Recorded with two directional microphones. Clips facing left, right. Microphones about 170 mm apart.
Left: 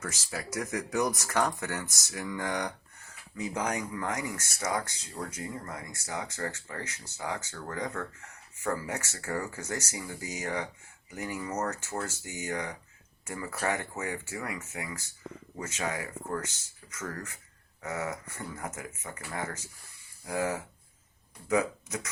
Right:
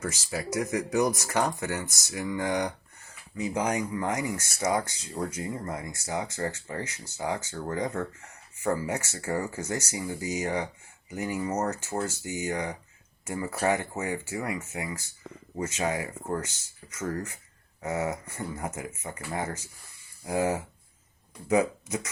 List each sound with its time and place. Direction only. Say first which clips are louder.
0.1 s speech: right 5 dB; 10° right (ahead or behind)